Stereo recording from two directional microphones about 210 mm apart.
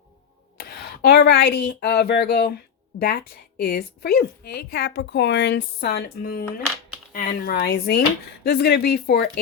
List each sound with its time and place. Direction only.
0.5 s a woman's voice: 45° left (ahead or behind)